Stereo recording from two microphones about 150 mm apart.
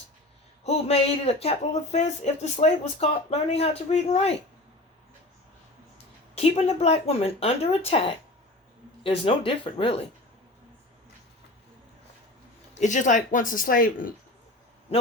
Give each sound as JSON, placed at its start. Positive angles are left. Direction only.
{"t": 0.6, "sound": "speech", "side_deg": 45}
{"t": 6.3, "sound": "speech", "side_deg": 45}
{"t": 12.8, "sound": "speech", "side_deg": 55}